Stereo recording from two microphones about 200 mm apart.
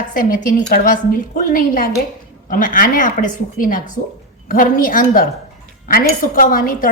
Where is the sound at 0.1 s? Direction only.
45° left (ahead or behind).